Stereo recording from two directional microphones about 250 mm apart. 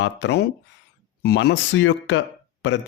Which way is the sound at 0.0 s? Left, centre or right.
Left.